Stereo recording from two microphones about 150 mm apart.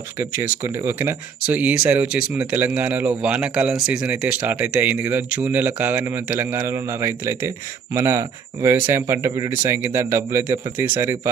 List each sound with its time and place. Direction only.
0.2 s speech: 15° right (ahead or behind)